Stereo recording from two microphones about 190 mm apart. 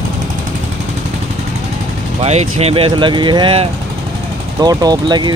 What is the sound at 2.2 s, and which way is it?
Speech, 35° right (ahead or behind).